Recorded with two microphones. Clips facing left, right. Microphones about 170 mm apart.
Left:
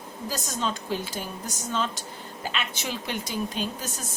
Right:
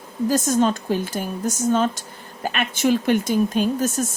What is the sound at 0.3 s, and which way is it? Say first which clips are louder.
Speech: right 12 dB; 50° right (ahead or behind).